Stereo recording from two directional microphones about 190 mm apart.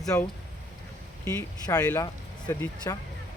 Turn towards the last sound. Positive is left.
turn(degrees=15)  # may be behind; listen again after turning